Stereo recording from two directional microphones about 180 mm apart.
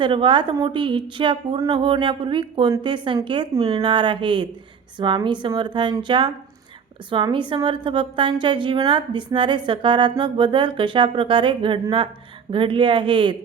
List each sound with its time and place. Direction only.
0.0 s a woman's voice: 25° right (ahead or behind)